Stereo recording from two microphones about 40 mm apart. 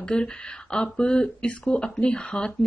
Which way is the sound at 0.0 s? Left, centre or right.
Left.